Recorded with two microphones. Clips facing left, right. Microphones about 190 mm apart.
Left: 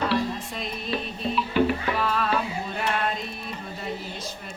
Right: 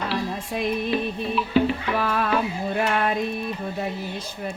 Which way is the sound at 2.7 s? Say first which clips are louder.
Right 5 dB; 60° right (ahead or behind).